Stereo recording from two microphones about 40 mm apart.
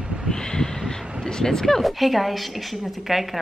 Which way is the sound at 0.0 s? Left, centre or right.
Centre.